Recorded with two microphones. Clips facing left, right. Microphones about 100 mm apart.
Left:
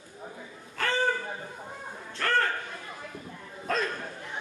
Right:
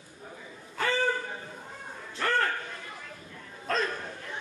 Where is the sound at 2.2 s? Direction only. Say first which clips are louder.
Even; 10° right (ahead or behind).